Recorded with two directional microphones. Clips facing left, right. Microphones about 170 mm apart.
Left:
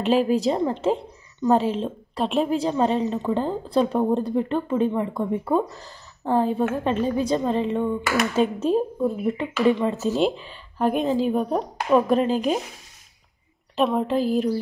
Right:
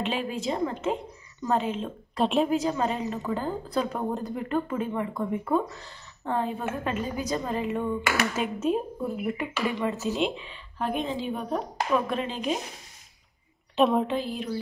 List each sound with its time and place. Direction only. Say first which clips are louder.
0.0 s speech: left 10 dB; 40° left (ahead or behind)
2.1 s a woman's voice: left 1 dB; centre (ahead or behind)
2.5 s a woman's voice: left 5 dB; 30° left (ahead or behind)
9.9 s speech: left 6 dB; 40° left (ahead or behind)
13.7 s a woman's voice: even; centre (ahead or behind)
14.1 s speech: left 8 dB; 40° left (ahead or behind)